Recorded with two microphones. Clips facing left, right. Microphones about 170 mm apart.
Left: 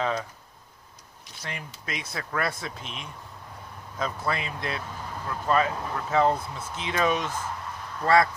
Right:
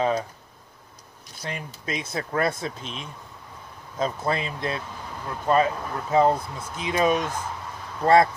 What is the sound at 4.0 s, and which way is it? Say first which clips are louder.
Speech: right 4 dB; 25° right (ahead or behind).